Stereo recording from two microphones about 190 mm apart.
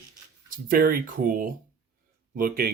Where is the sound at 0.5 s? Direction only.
50° right (ahead or behind).